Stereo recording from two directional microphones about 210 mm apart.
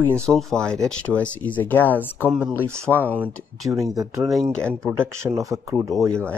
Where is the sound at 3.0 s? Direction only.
10° right (ahead or behind).